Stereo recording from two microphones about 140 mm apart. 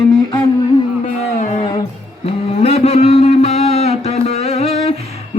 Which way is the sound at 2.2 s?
50° left (ahead or behind).